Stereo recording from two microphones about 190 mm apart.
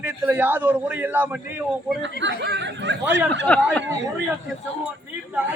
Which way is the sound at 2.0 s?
70° right (ahead or behind).